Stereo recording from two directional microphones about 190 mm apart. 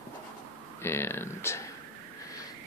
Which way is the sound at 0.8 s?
15° left (ahead or behind).